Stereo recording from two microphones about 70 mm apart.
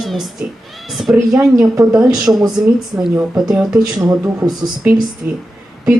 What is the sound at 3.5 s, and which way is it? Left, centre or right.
Speech, centre.